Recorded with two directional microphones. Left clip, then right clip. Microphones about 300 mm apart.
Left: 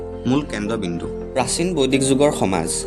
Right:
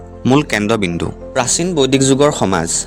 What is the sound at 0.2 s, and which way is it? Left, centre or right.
Speech, right.